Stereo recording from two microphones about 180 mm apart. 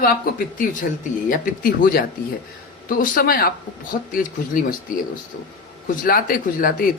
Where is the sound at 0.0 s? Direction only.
50° left (ahead or behind).